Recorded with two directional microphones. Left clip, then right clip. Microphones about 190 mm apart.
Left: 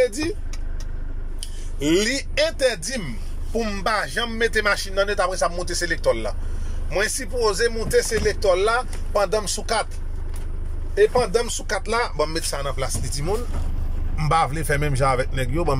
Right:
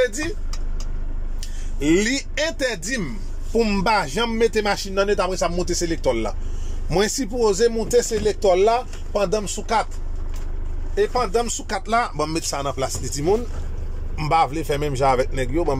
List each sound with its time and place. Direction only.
0.0 s speech: 10° left (ahead or behind)
1.4 s a man's voice: 5° left (ahead or behind); by 6.3 s 10° right (ahead or behind)
6.9 s speech: 25° right (ahead or behind); by 9.8 s 5° right (ahead or behind)
11.0 s speech: 5° right (ahead or behind)
12.2 s speech: 10° right (ahead or behind); by 15.8 s 5° left (ahead or behind)